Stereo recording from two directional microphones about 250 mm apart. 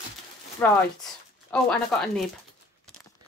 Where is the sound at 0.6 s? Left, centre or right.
Centre.